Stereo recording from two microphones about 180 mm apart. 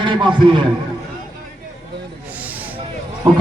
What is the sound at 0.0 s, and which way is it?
Speech, 25° right (ahead or behind).